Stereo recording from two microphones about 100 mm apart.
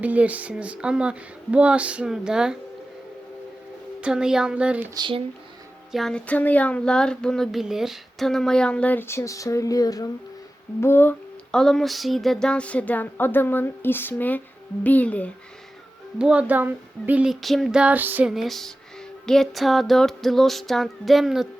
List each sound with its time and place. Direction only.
0.0 s speech: 15° right (ahead or behind)
4.0 s speech: 5° right (ahead or behind)
5.9 s child singing: 5° left (ahead or behind); by 10.1 s 40° left (ahead or behind)
10.8 s humming: 25° left (ahead or behind)
11.5 s child singing: 5° left (ahead or behind)
16.1 s speech: 10° right (ahead or behind)
17.2 s speech: centre (ahead or behind); by 18.3 s 20° right (ahead or behind)
18.3 s music: centre (ahead or behind)